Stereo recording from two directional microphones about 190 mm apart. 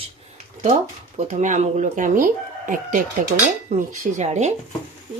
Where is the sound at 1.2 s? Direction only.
40° right (ahead or behind).